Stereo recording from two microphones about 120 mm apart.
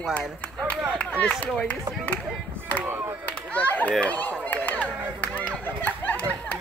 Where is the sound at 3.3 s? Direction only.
10° left (ahead or behind).